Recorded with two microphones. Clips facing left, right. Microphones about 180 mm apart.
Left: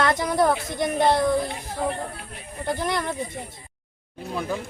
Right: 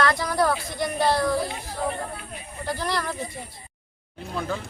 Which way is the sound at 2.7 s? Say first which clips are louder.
Left 2 dB; 20° left (ahead or behind).